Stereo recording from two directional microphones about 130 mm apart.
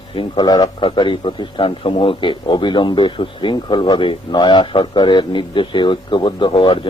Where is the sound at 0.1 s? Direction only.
40° left (ahead or behind).